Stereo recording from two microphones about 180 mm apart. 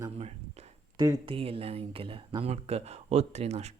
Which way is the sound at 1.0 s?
25° right (ahead or behind).